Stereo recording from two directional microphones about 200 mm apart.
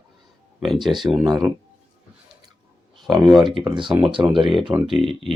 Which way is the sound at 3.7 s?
25° right (ahead or behind).